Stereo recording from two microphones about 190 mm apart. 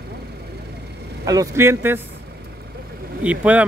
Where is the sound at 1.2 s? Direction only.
20° right (ahead or behind).